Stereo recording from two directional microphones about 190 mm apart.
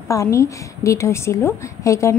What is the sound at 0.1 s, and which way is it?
A woman's voice, 15° left (ahead or behind).